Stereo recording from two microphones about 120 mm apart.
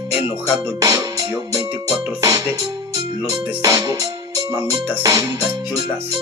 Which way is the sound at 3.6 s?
30° right (ahead or behind).